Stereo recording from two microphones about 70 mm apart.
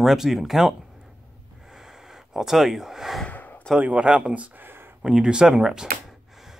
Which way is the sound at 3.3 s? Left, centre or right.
Left.